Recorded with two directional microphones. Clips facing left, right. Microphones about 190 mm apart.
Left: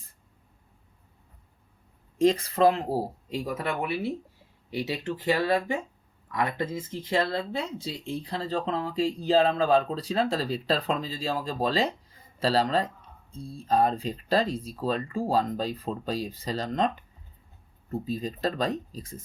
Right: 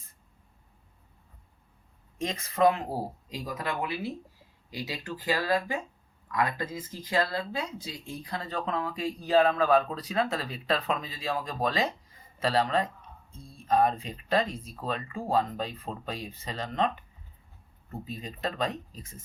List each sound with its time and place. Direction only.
2.1 s speech: 35° left (ahead or behind)
18.0 s speech: 35° left (ahead or behind)